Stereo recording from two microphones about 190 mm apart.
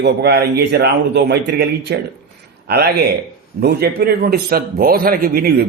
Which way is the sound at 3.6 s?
60° right (ahead or behind).